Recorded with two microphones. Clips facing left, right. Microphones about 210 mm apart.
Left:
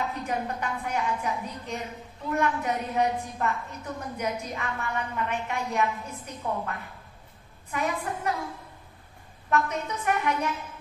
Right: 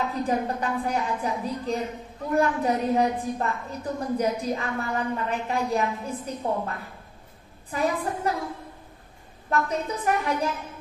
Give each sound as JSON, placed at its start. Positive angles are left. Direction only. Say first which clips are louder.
{"t": 0.1, "sound": "a woman's voice", "louder": "right 5 dB", "side_deg": -35}
{"t": 7.7, "sound": "a woman's voice", "louder": "right 4 dB", "side_deg": -30}
{"t": 9.5, "sound": "a woman's voice", "louder": "right 1 dB", "side_deg": -35}